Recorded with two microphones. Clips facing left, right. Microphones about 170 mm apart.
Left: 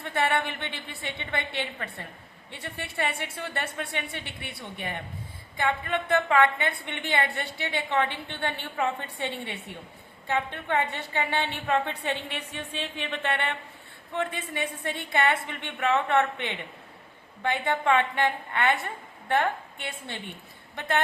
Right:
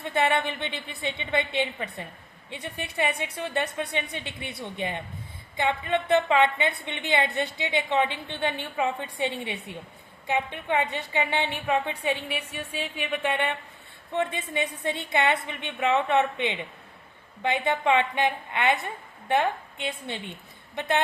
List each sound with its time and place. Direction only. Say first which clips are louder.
0.0 s a woman's voice: right 2 dB; 20° right (ahead or behind)